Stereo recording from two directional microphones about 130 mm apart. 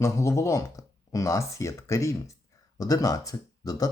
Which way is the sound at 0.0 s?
20° left (ahead or behind).